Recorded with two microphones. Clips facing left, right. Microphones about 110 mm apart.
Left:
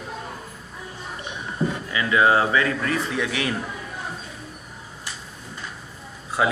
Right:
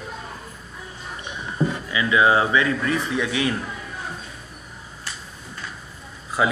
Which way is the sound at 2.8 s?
25° right (ahead or behind).